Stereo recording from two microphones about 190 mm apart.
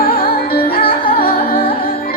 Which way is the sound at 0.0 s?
50° left (ahead or behind).